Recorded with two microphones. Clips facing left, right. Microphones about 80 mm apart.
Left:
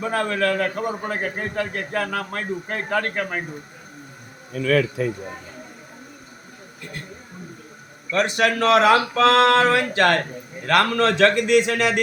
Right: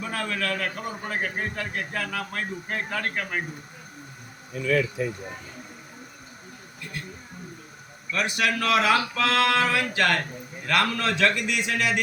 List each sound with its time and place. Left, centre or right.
0.0 s a man's voice: left
4.5 s speech: left
8.2 s a man's voice: left
9.1 s a man's voice: left